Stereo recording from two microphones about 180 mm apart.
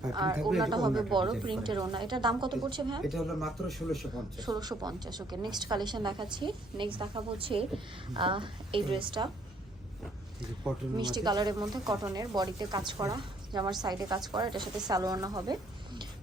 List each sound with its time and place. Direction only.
0.0 s a woman's voice: 20° right (ahead or behind)
3.0 s speech: centre (ahead or behind)
4.4 s a woman's voice: 20° right (ahead or behind)
10.9 s a woman's voice: 25° right (ahead or behind)